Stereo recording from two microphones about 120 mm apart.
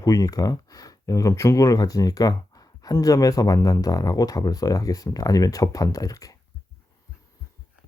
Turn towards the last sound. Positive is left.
turn(degrees=30)  # may be behind; listen again after turning